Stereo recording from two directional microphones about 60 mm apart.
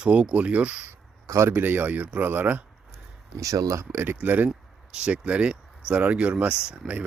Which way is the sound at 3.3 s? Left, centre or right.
Right.